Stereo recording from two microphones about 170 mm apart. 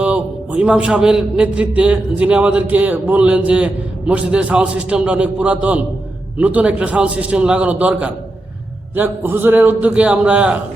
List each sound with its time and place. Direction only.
0.0 s a man's voice: 5° right (ahead or behind)